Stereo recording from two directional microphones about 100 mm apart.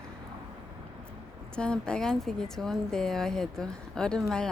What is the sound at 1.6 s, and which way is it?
Speech, 10° left (ahead or behind).